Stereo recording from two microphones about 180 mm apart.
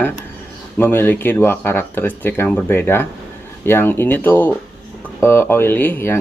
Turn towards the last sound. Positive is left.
turn(degrees=10)  # may be behind; listen again after turning